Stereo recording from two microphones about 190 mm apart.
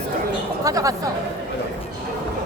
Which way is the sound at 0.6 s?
15° right (ahead or behind).